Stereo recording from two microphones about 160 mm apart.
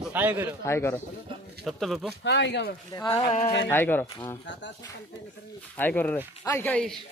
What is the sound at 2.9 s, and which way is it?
Speech, 20° left (ahead or behind).